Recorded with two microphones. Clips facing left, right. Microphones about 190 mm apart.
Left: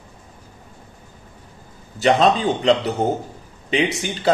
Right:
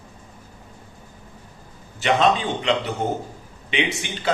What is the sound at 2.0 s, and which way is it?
A man's voice, 35° left (ahead or behind).